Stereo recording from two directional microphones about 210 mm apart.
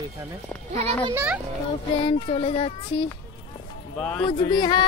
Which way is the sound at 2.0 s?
30° left (ahead or behind).